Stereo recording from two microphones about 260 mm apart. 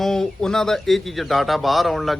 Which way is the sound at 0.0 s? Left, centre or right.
Centre.